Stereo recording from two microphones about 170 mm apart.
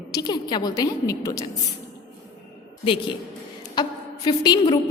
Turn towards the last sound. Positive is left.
turn(degrees=25)  # may be behind; listen again after turning